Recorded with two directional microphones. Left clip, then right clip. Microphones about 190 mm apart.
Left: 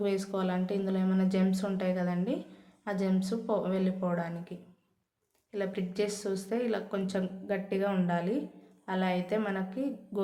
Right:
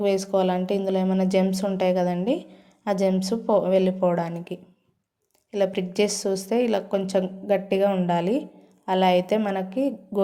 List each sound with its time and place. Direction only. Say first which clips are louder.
0.0 s a woman's voice: right 10 dB; 30° right (ahead or behind)